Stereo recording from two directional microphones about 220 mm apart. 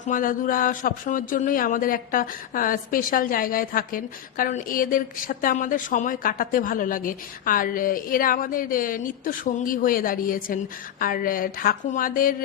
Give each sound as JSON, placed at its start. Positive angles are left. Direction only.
{"t": 0.1, "sound": "speech", "side_deg": 40}